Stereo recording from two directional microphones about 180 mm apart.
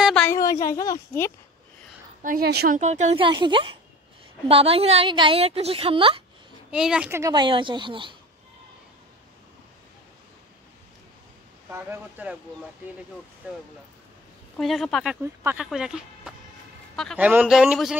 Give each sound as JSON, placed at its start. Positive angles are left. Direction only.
{"t": 0.0, "sound": "a sound", "side_deg": 5}
{"t": 0.3, "sound": "a sound", "side_deg": 20}
{"t": 0.7, "sound": "speech", "side_deg": 15}
{"t": 2.2, "sound": "a woman's voice", "side_deg": -60}
{"t": 2.8, "sound": "a woman's voice", "side_deg": -40}
{"t": 3.3, "sound": "a woman's voice", "side_deg": -25}
{"t": 6.7, "sound": "speech", "side_deg": -5}
{"t": 11.7, "sound": "speech", "side_deg": -10}
{"t": 14.6, "sound": "a man's voice", "side_deg": 0}
{"t": 17.2, "sound": "speech", "side_deg": -10}